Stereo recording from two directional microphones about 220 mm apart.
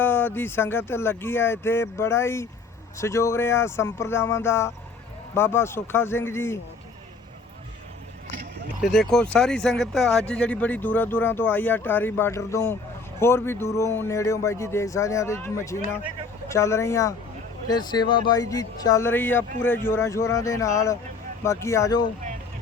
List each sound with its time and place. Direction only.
0.0 s speech: 10° left (ahead or behind)
8.8 s speech: centre (ahead or behind)